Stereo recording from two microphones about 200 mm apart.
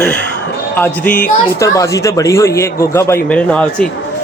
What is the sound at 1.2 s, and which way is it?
A child's voice, 15° left (ahead or behind).